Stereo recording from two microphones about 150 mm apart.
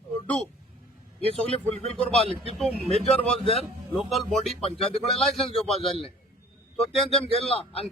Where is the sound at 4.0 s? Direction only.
Centre (ahead or behind).